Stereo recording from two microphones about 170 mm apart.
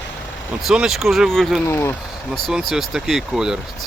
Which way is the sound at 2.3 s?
Centre (ahead or behind).